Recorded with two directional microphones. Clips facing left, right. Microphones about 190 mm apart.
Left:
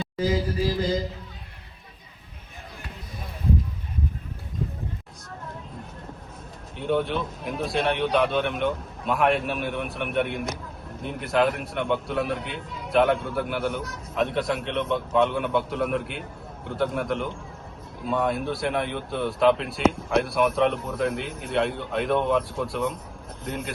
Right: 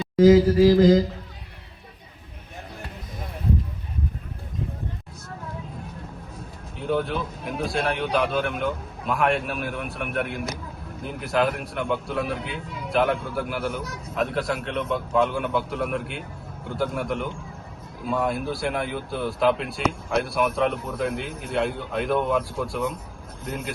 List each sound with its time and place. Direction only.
0.2 s mantra: 90° right
6.7 s a man's voice: centre (ahead or behind)